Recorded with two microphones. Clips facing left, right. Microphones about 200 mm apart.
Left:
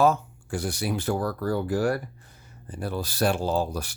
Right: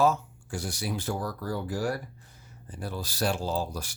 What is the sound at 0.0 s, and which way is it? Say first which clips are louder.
Speech: left 3 dB; 60° left (ahead or behind).